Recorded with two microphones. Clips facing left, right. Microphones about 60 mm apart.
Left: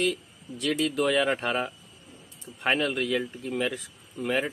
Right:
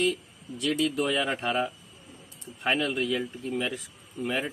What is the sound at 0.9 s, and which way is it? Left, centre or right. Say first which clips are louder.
A man's voice: left 3 dB; left.